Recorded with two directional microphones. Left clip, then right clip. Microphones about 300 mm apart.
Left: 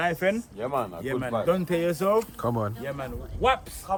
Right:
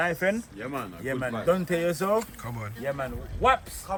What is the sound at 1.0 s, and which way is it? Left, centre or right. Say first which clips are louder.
Speech: right 2 dB; centre.